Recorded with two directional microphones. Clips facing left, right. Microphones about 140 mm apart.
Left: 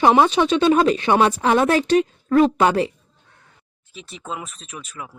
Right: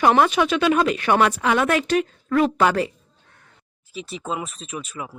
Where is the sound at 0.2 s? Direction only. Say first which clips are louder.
Left 2 dB; 30° left (ahead or behind).